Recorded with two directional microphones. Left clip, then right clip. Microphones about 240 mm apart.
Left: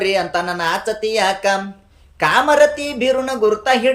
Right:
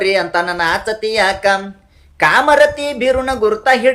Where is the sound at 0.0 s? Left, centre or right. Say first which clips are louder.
Right 3 dB; centre.